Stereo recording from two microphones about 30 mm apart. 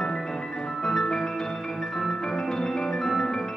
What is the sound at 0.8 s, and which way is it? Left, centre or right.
Music, centre.